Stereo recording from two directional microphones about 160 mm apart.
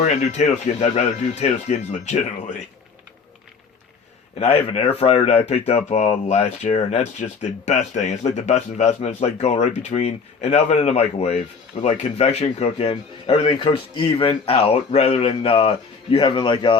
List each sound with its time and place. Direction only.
0.0 s speech: 45° left (ahead or behind)
4.4 s speech: 40° left (ahead or behind)